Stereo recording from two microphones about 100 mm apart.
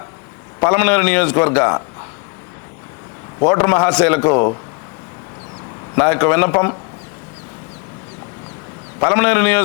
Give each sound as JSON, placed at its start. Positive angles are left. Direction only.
{"t": 0.6, "sound": "a man's voice", "side_deg": 25}
{"t": 3.4, "sound": "a man's voice", "side_deg": 25}
{"t": 5.9, "sound": "a man's voice", "side_deg": 20}
{"t": 9.0, "sound": "a man's voice", "side_deg": 25}